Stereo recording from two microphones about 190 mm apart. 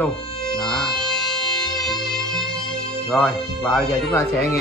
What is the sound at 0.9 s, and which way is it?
Music, centre (ahead or behind).